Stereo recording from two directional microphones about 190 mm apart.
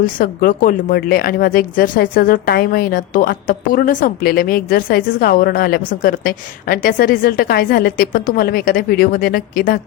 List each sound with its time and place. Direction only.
0.0 s speech: 50° left (ahead or behind)